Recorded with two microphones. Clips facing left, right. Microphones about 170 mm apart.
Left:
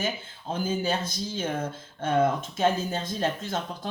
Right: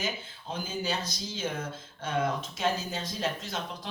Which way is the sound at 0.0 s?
50° left (ahead or behind).